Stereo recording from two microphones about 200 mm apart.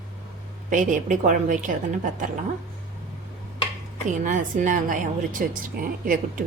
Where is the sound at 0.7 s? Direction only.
40° right (ahead or behind).